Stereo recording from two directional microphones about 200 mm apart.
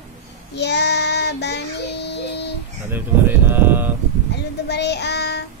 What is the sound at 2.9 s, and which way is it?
Mantra, 10° right (ahead or behind).